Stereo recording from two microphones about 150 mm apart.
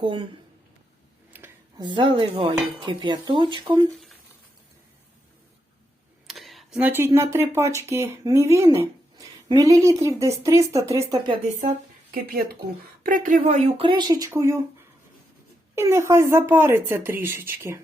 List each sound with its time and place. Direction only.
0.0 s speech: 35° right (ahead or behind)
1.3 s a sound: 10° right (ahead or behind)
1.8 s speech: 35° right (ahead or behind)
6.2 s speech: centre (ahead or behind); by 11.3 s 25° right (ahead or behind)
13.0 s speech: 65° right (ahead or behind)
13.7 s speech: 30° right (ahead or behind)
15.7 s speech: 20° right (ahead or behind)